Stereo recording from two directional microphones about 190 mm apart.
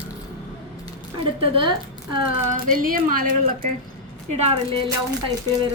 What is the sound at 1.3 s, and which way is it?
Speech, 30° right (ahead or behind).